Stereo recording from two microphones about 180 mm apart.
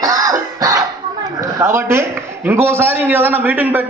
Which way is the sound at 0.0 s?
20° right (ahead or behind).